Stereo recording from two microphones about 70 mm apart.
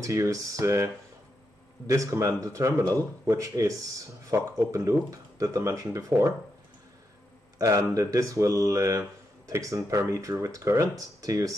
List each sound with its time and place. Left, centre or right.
0.0 s speech: right
1.9 s speech: right
7.5 s speech: right